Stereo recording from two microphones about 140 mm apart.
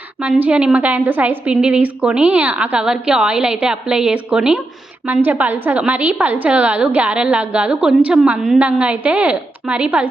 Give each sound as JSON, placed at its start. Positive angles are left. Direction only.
{"t": 0.2, "sound": "a woman's voice", "side_deg": -10}